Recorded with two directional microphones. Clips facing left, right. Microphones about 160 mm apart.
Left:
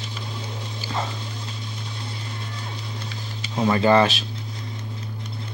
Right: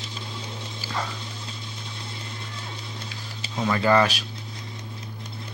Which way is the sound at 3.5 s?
30° left (ahead or behind).